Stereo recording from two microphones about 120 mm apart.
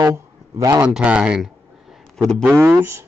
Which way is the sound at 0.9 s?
10° right (ahead or behind).